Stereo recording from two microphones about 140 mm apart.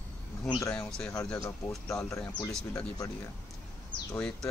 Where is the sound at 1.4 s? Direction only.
25° left (ahead or behind).